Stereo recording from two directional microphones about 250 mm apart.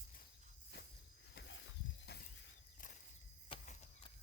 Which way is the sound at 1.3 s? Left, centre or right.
Left.